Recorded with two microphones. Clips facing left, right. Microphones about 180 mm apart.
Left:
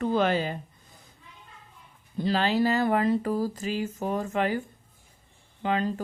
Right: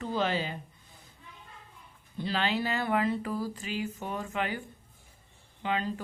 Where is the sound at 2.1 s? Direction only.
40° left (ahead or behind).